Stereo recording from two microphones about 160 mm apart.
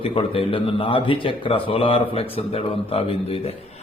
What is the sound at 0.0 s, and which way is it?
A man's voice, 35° left (ahead or behind).